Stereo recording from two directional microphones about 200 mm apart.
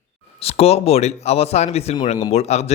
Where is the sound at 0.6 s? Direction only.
30° left (ahead or behind).